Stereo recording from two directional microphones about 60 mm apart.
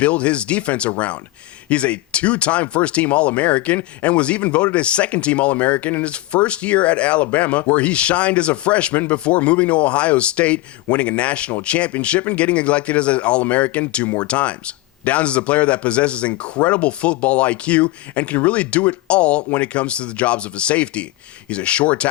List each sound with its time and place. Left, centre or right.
0.0 s speech: left